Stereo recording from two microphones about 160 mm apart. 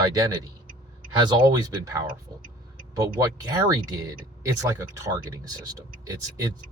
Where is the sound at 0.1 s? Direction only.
25° right (ahead or behind).